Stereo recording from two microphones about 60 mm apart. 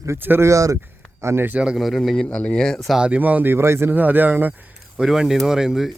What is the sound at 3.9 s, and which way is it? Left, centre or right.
Speech, right.